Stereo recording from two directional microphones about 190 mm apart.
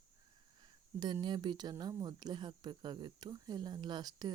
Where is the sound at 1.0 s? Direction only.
25° right (ahead or behind).